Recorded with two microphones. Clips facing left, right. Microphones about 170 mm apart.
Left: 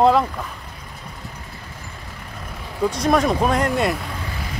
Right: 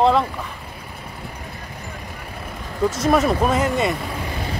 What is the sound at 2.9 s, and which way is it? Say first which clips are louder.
Speech: even; 5° right (ahead or behind).